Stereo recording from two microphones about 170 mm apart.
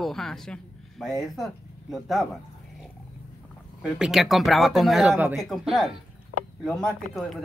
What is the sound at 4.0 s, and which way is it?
Speech, centre (ahead or behind).